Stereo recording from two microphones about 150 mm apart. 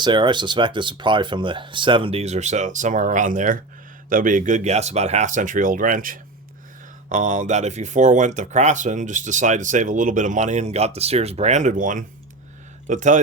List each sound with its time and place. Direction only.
0.0 s speech: 30° right (ahead or behind); by 13.1 s 55° right (ahead or behind)